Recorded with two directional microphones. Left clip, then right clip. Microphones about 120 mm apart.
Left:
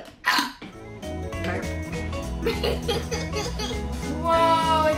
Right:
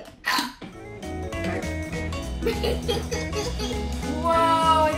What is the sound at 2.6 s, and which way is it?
Music, 25° left (ahead or behind).